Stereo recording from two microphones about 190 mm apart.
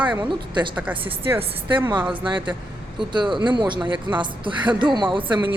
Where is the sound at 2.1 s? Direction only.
25° right (ahead or behind).